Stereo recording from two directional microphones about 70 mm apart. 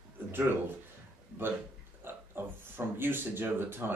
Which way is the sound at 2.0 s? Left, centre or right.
Right.